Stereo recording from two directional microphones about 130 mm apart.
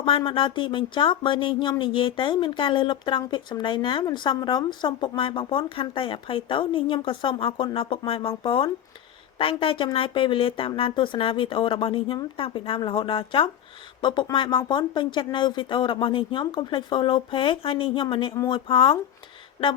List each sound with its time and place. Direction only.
0.3 s speech: 40° left (ahead or behind)